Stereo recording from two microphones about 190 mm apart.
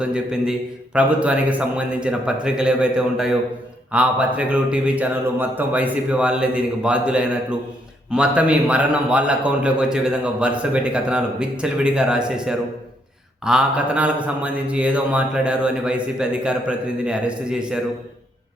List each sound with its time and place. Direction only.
0.0 s a man's voice: 5° right (ahead or behind)